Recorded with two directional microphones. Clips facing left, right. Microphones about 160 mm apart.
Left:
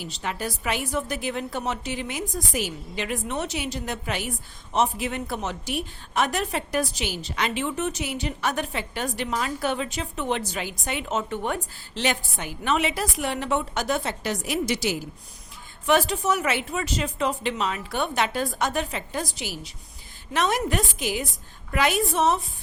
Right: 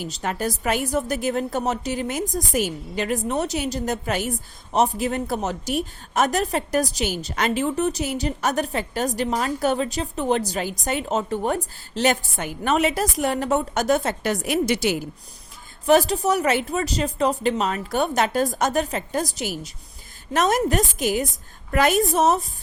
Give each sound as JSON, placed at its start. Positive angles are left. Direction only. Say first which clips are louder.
{"t": 0.0, "sound": "a woman's voice", "louder": "right 4 dB", "side_deg": -45}
{"t": 15.9, "sound": "a woman's voice", "louder": "right 4 dB", "side_deg": -40}